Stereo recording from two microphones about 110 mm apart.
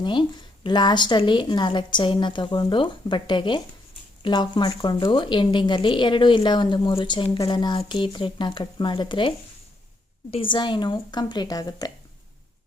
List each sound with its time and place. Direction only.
0.0 s a woman's voice: 45° left (ahead or behind)
10.3 s a woman's voice: 45° left (ahead or behind)